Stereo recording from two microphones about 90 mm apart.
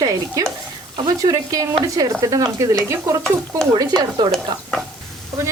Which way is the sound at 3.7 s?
50° right (ahead or behind).